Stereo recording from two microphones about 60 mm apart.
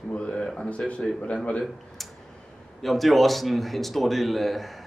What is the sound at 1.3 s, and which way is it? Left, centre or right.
Speech, centre.